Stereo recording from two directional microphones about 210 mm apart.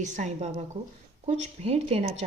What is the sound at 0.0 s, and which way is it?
A woman's voice, 35° right (ahead or behind).